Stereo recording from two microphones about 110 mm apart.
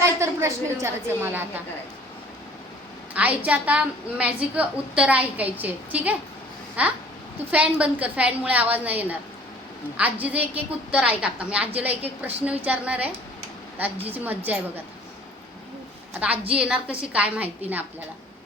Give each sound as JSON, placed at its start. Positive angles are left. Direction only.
{"t": 0.0, "sound": "a woman's voice", "side_deg": -25}
{"t": 3.2, "sound": "a woman's voice", "side_deg": -15}
{"t": 16.6, "sound": "a woman's voice", "side_deg": -10}